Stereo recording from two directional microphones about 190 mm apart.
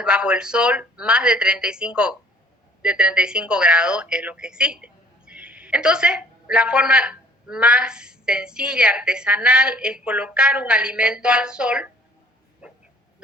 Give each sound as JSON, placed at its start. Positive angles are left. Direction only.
{"t": 0.0, "sound": "a woman's voice", "side_deg": -5}
{"t": 12.6, "sound": "dog", "side_deg": -5}